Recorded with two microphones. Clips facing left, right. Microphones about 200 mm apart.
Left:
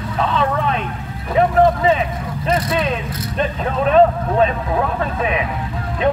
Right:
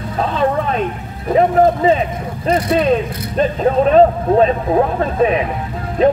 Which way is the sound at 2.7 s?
35° right (ahead or behind).